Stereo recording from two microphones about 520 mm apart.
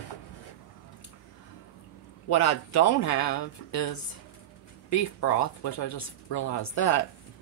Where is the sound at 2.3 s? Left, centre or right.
Left.